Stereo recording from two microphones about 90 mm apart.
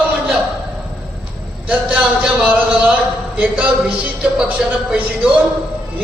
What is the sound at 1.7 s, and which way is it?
A man's voice, 15° right (ahead or behind).